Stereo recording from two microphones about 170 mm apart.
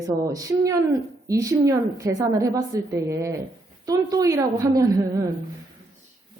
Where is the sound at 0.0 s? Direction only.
20° right (ahead or behind).